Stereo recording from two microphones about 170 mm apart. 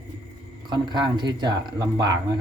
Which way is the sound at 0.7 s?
25° right (ahead or behind).